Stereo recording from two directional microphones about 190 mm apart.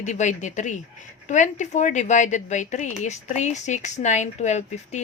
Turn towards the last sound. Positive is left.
turn(degrees=35)  # may be behind; listen again after turning